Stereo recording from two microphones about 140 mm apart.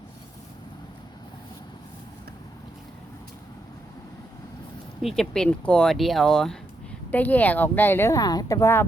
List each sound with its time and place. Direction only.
5.0 s speech: 5° left (ahead or behind)